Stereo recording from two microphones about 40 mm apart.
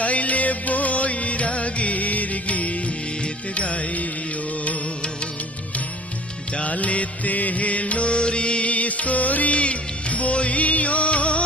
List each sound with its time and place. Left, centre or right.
0.0 s music: left
6.5 s music: left